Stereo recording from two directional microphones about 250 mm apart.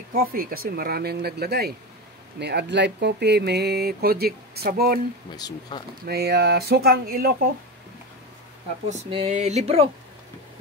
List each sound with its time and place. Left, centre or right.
0.1 s speech: right
5.3 s speech: centre
5.9 s speech: right
8.8 s a sound: right